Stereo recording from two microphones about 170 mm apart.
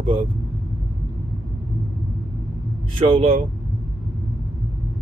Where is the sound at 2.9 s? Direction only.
30° right (ahead or behind).